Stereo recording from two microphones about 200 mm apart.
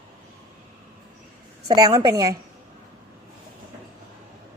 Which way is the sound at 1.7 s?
20° right (ahead or behind).